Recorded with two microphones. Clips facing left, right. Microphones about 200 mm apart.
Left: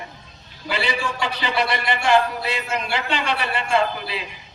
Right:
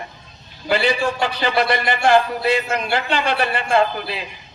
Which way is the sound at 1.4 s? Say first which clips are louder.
Right 4 dB; 45° right (ahead or behind).